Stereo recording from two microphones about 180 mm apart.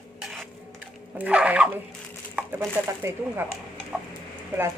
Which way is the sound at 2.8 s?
10° right (ahead or behind).